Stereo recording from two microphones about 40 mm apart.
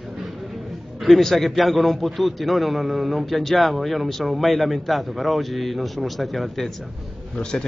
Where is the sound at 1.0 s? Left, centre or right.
Centre.